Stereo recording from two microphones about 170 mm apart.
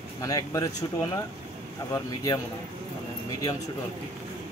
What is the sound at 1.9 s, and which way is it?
Speech, 20° left (ahead or behind).